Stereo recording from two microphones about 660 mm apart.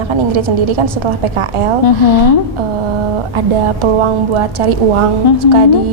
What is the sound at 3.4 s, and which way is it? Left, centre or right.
A woman's voice, right.